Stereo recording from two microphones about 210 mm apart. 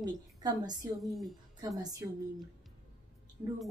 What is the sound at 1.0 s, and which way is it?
Speech, centre (ahead or behind).